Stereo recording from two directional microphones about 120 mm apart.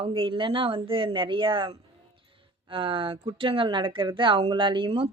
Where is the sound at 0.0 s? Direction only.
45° right (ahead or behind).